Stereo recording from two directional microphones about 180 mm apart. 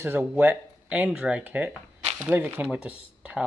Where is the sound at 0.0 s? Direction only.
10° right (ahead or behind).